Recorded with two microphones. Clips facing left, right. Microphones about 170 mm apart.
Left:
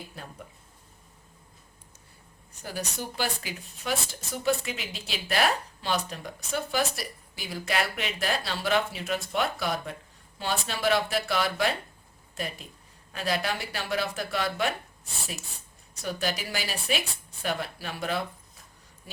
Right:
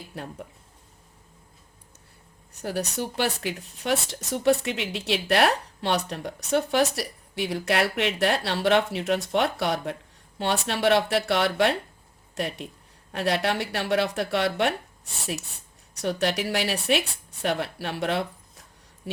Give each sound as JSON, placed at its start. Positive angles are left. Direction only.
{"t": 2.5, "sound": "a woman's voice", "side_deg": -65}
{"t": 16.0, "sound": "a woman's voice", "side_deg": -70}
{"t": 19.1, "sound": "a sound", "side_deg": -70}